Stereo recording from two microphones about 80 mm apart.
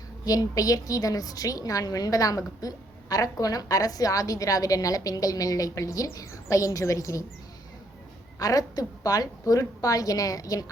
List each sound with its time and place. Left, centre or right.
0.3 s a woman's voice: left
8.4 s a woman's voice: left